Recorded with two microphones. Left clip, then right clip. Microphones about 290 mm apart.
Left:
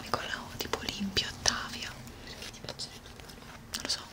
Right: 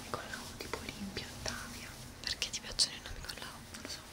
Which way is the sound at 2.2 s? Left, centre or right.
Right.